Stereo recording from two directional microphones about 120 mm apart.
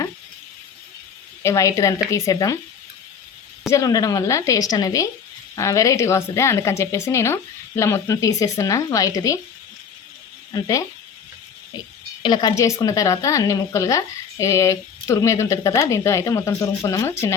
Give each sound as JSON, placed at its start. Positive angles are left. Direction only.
{"t": 1.4, "sound": "speech", "side_deg": 25}
{"t": 3.7, "sound": "speech", "side_deg": 30}
{"t": 10.5, "sound": "speech", "side_deg": 30}
{"t": 12.2, "sound": "speech", "side_deg": 35}